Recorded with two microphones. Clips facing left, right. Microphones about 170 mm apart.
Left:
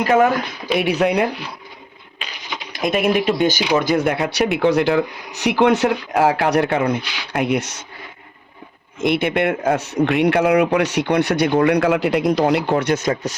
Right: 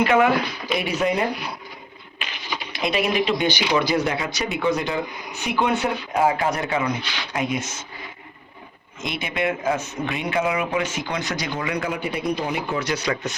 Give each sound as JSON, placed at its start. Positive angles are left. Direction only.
{"t": 0.0, "sound": "speech", "side_deg": 40}
{"t": 0.8, "sound": "speech", "side_deg": 65}
{"t": 2.7, "sound": "speech", "side_deg": 50}
{"t": 9.0, "sound": "speech", "side_deg": 60}